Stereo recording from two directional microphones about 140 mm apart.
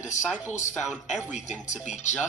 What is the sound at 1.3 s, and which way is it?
Speech, 60° left (ahead or behind).